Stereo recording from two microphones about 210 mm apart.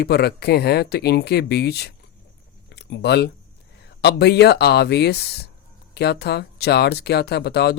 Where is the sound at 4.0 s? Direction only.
50° left (ahead or behind).